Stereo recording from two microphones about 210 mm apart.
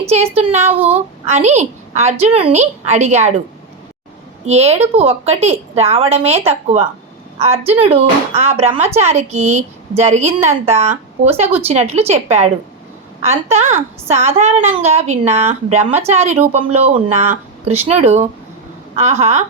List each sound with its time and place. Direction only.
0.0 s a woman's voice: 30° right (ahead or behind)
0.6 s speech: 10° right (ahead or behind)
1.2 s speech: 30° right (ahead or behind)
4.4 s a woman's voice: 30° right (ahead or behind)